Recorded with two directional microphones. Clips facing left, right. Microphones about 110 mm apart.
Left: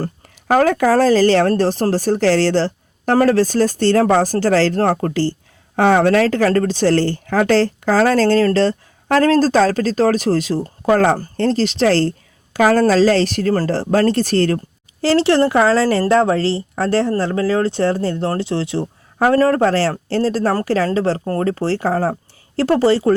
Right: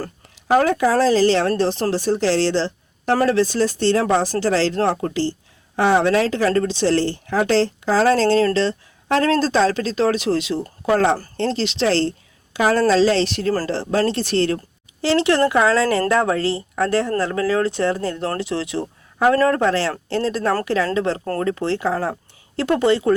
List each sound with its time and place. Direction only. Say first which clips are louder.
0.4 s a woman's voice: left 2 dB; 50° left (ahead or behind)